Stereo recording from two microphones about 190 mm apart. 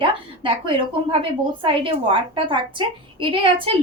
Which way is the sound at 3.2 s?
25° right (ahead or behind).